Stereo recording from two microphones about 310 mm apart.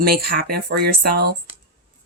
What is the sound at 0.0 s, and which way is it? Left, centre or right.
Speech, right.